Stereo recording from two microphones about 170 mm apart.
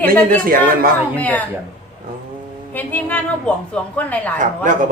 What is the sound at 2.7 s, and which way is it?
A woman's voice, 10° left (ahead or behind).